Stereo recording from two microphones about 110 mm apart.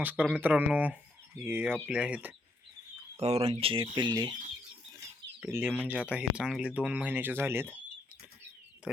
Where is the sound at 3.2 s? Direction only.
70° right (ahead or behind); by 4.3 s 40° right (ahead or behind).